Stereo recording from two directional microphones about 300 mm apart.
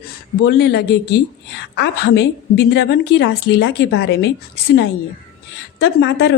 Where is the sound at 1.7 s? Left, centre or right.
Left.